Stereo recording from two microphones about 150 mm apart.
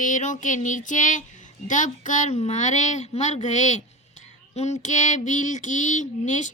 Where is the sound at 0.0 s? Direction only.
55° left (ahead or behind).